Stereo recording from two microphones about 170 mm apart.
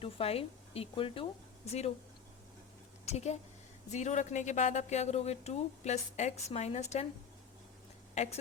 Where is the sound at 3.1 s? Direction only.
40° left (ahead or behind).